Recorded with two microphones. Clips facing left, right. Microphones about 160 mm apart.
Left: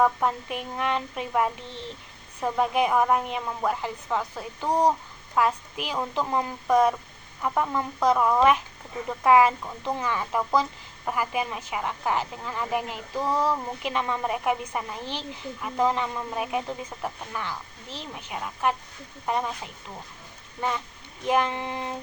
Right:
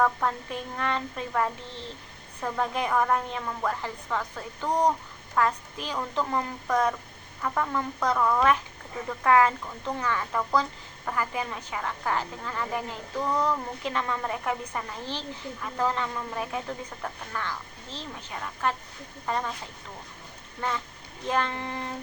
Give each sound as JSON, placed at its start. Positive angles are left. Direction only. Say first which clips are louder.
{"t": 0.0, "sound": "speech", "louder": "left 2 dB", "side_deg": 15}
{"t": 20.6, "sound": "speech", "louder": "left 2 dB", "side_deg": 15}